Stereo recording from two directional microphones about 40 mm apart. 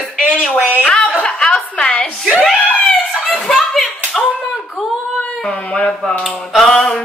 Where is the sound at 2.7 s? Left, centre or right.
Left.